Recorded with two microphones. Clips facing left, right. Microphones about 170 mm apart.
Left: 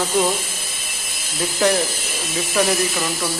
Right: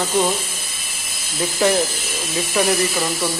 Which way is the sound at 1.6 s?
Centre (ahead or behind).